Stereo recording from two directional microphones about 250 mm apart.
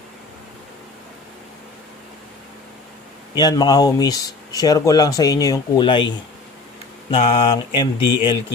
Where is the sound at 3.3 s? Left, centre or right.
Centre.